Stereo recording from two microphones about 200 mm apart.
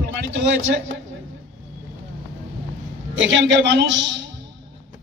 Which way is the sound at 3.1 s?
65° right (ahead or behind).